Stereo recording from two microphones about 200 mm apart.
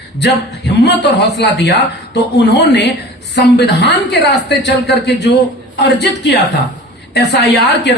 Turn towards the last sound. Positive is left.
turn(degrees=60)  # may be behind; listen again after turning